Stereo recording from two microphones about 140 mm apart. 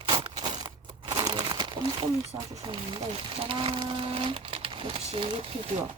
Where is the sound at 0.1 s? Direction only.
35° right (ahead or behind).